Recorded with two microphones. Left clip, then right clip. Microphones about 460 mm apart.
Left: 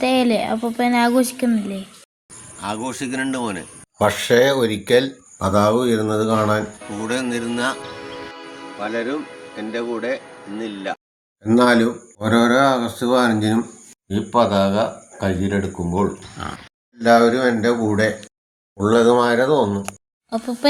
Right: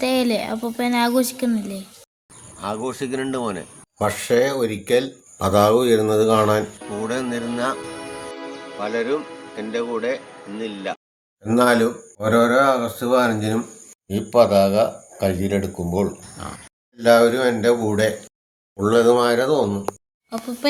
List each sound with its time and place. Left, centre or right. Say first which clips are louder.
0.0 s speech: left 3 dB; right
2.6 s speech: even; centre
3.9 s speech: left 3 dB; right
7.1 s speech: left 4 dB; centre
8.8 s speech: right 1 dB; centre
11.4 s speech: left 1 dB; right
14.1 s speech: right 2 dB; right
16.4 s speech: left 4 dB; right